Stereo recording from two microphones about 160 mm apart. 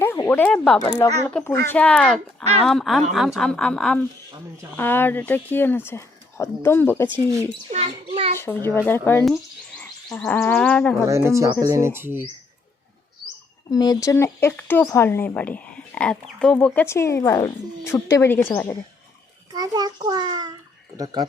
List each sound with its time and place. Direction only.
0.0 s speech: 15° left (ahead or behind)
0.8 s speech: 20° left (ahead or behind)
1.3 s a woman's voice: 10° left (ahead or behind)
7.7 s a child's voice: 35° right (ahead or behind)
8.4 s speech: 15° left (ahead or behind)
11.0 s speech: 20° right (ahead or behind)
13.2 s speech: 25° left (ahead or behind)
19.5 s a child's voice: 25° right (ahead or behind)